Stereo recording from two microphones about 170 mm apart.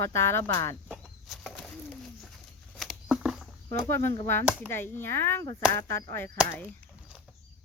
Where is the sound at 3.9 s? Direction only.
15° left (ahead or behind).